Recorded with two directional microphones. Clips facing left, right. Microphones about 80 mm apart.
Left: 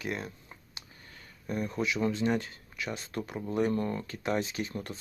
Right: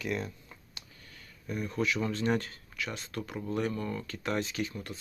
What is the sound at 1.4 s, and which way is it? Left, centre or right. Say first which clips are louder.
Speech: even; left.